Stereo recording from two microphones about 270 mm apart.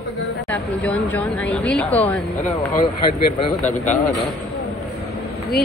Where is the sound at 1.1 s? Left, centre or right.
Centre.